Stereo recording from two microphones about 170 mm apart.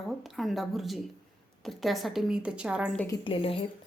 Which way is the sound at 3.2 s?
30° left (ahead or behind).